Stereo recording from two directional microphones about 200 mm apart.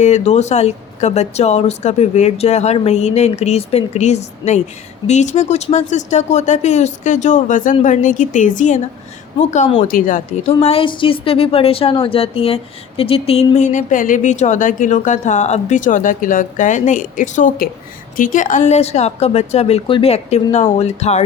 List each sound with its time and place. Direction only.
0.0 s speech: 35° left (ahead or behind)
9.8 s a woman's voice: 40° left (ahead or behind)